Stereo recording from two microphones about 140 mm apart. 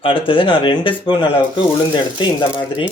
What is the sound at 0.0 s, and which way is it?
Speech, 40° left (ahead or behind).